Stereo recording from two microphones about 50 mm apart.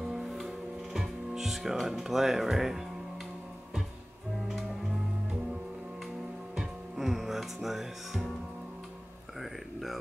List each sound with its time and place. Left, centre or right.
0.1 s music: centre
0.9 s speech: centre
6.5 s music: centre
9.4 s a sound: centre